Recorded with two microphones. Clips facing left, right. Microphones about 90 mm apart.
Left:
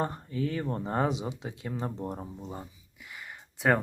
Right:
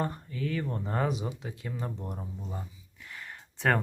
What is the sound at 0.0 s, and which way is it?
Speech, 30° left (ahead or behind).